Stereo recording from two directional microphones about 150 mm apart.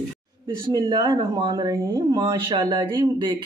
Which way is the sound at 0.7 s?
30° right (ahead or behind).